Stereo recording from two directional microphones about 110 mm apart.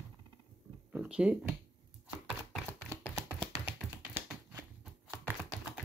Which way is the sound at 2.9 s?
25° right (ahead or behind).